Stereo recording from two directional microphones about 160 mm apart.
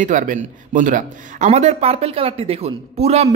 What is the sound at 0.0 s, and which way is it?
Speech, 50° right (ahead or behind).